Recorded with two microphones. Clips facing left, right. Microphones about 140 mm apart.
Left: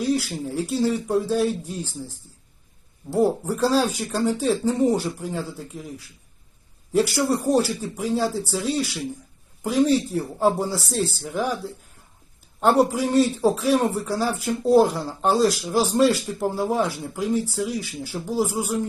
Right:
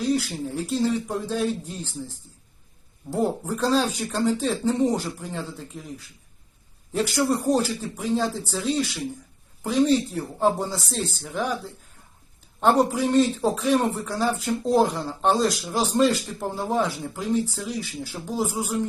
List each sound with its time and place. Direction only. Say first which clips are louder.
0.1 s speech: left 1 dB; 5° left (ahead or behind)
3.1 s speech: left 4 dB; 10° left (ahead or behind)
6.9 s speech: left 2 dB; 10° left (ahead or behind)
12.5 s a man's voice: left 1 dB; 5° left (ahead or behind)